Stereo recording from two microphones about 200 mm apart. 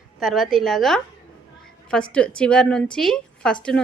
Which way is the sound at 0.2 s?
Centre (ahead or behind).